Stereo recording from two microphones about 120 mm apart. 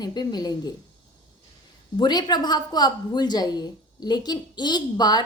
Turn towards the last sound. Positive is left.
turn(degrees=35)  # may be behind; listen again after turning